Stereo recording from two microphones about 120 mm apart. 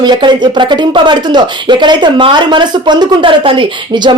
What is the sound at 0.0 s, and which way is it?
Speech, 40° right (ahead or behind).